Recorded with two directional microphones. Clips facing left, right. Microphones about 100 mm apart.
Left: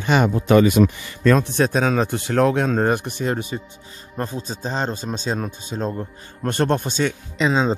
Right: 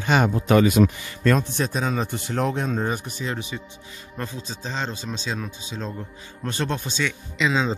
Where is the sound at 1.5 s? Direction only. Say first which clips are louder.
Left 6 dB; 65° left (ahead or behind).